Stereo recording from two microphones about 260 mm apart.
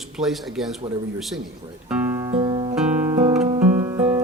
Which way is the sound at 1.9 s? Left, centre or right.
Centre.